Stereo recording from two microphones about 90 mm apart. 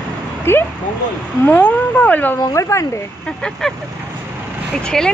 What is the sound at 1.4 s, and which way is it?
Speech, 15° left (ahead or behind).